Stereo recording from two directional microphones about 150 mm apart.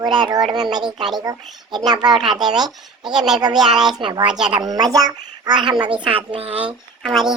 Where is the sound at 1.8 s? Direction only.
30° right (ahead or behind).